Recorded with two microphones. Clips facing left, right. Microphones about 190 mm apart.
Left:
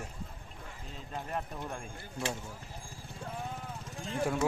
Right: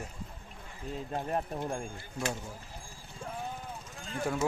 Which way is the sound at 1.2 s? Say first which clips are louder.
Right 4 dB; 35° right (ahead or behind).